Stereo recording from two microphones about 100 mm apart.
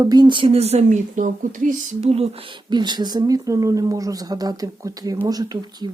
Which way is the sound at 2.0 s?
80° right.